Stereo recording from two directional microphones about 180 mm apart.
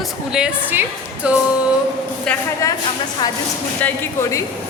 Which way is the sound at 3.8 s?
15° left (ahead or behind).